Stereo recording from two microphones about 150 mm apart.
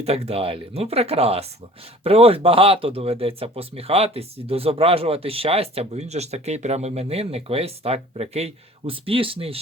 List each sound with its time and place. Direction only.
0.0 s speech: 45° right (ahead or behind)